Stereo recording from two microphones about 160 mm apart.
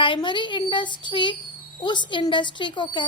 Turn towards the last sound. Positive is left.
turn(degrees=30)  # may be behind; listen again after turning